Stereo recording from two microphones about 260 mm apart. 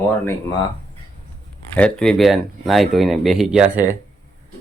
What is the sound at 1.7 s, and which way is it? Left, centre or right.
Speech, centre.